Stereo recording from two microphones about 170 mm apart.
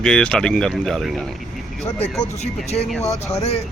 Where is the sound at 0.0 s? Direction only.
5° left (ahead or behind).